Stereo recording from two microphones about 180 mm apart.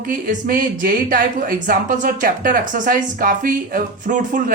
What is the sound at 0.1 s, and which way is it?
Speech, 50° right (ahead or behind).